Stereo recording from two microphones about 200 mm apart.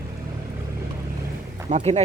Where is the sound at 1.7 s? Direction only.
30° right (ahead or behind).